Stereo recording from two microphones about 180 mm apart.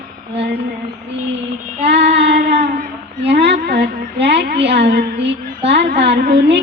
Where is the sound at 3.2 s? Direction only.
70° right (ahead or behind).